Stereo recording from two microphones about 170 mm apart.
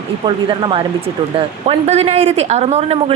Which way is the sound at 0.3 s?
30° right (ahead or behind).